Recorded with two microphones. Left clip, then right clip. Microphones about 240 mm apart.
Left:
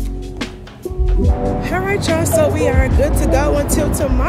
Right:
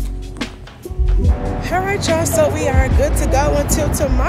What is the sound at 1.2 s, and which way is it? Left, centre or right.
Music, centre.